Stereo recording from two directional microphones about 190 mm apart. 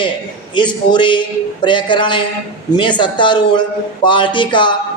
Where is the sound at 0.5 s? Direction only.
25° left (ahead or behind).